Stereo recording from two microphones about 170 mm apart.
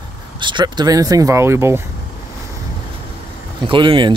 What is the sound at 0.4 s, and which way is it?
Speech, 25° right (ahead or behind).